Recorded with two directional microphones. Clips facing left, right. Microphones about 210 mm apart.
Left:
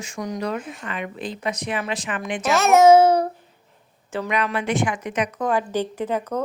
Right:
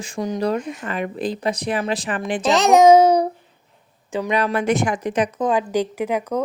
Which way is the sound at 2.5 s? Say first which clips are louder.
Right 1 dB; 15° right (ahead or behind).